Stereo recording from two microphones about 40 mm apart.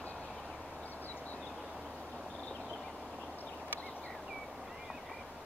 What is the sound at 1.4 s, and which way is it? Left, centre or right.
Vehicle, centre.